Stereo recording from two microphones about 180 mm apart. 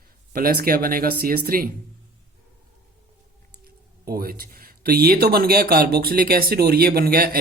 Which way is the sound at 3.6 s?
55° right (ahead or behind).